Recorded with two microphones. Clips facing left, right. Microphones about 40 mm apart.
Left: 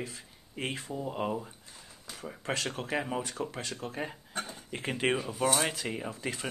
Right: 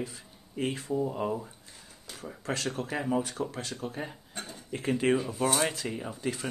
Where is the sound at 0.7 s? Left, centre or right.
Centre.